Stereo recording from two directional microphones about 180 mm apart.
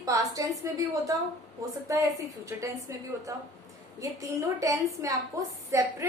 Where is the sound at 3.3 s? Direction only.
15° right (ahead or behind).